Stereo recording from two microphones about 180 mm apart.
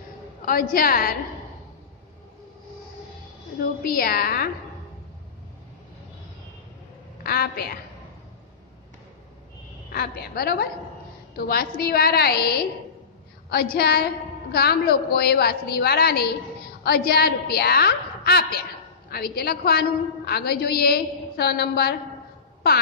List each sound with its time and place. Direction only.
0.5 s a woman's voice: 55° left (ahead or behind)
3.8 s a woman's voice: 55° left (ahead or behind)
7.2 s a woman's voice: 60° left (ahead or behind)
9.9 s a woman's voice: 60° left (ahead or behind)